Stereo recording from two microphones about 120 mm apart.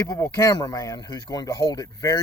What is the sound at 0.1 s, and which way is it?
Speech, 30° left (ahead or behind).